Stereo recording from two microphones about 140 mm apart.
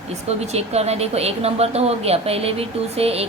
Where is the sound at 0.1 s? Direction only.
50° right (ahead or behind).